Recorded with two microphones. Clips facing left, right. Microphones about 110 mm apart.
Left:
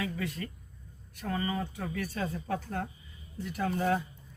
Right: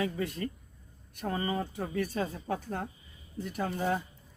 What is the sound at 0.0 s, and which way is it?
Speech, 30° right (ahead or behind).